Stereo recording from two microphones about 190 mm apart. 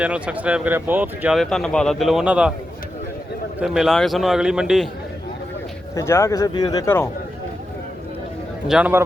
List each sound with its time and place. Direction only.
0.0 s speech: 5° right (ahead or behind)
3.6 s speech: centre (ahead or behind)
6.0 s speech: 15° left (ahead or behind)
8.6 s a man's voice: 5° right (ahead or behind)